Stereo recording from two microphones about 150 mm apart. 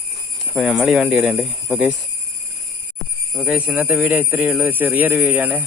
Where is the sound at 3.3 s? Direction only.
5° left (ahead or behind).